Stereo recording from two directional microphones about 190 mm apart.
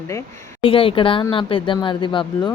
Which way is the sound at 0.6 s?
30° left (ahead or behind).